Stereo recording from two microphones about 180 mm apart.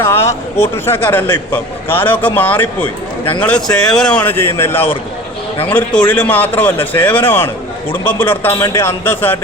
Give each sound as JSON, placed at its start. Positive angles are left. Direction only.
{"t": 0.0, "sound": "a man's voice", "side_deg": 15}
{"t": 2.8, "sound": "a man's voice", "side_deg": 25}
{"t": 3.4, "sound": "a man's voice", "side_deg": 5}